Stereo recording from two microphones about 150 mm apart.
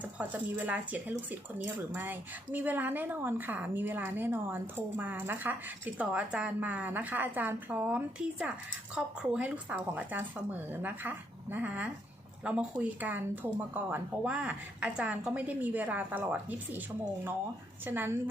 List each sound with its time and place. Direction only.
0.0 s speech: 10° right (ahead or behind)
17.8 s speech: 15° right (ahead or behind)